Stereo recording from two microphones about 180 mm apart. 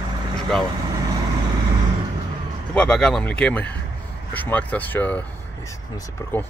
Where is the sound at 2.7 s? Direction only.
5° left (ahead or behind).